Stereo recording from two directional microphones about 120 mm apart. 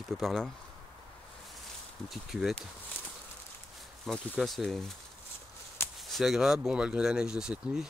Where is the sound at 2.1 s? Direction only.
Centre (ahead or behind).